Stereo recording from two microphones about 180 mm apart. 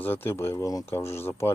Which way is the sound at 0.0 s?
10° left (ahead or behind).